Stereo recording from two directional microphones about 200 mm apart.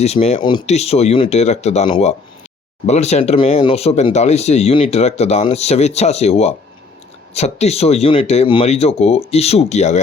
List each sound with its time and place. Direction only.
0.0 s speech: 30° left (ahead or behind)